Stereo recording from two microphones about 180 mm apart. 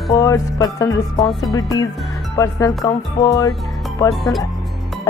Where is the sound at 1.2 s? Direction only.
Centre (ahead or behind).